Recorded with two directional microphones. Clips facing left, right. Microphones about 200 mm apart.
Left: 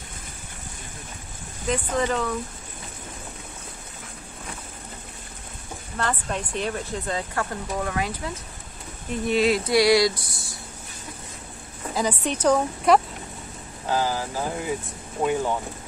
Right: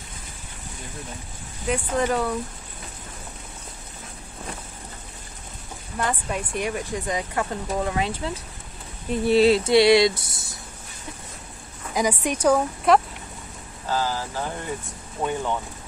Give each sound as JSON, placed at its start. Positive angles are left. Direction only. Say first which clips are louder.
{"t": 1.7, "sound": "speech", "louder": "right 1 dB", "side_deg": -10}
{"t": 5.9, "sound": "speech", "louder": "right 1 dB", "side_deg": -10}
{"t": 9.2, "sound": "a sound", "louder": "right 4 dB", "side_deg": -30}
{"t": 11.9, "sound": "a woman's voice", "louder": "right 2 dB", "side_deg": -10}
{"t": 12.5, "sound": "speech", "louder": "even", "side_deg": 0}
{"t": 13.8, "sound": "speech", "louder": "left 1 dB", "side_deg": 15}